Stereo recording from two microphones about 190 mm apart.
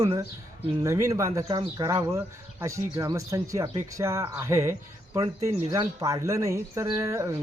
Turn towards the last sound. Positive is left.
turn(degrees=-15)  # may be behind; listen again after turning